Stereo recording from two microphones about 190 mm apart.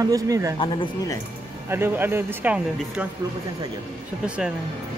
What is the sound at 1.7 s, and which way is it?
Speech, 10° right (ahead or behind).